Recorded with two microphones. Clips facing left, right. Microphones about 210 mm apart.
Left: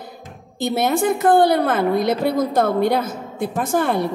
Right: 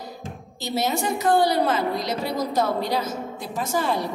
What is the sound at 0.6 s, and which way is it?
A woman's voice, 55° left (ahead or behind).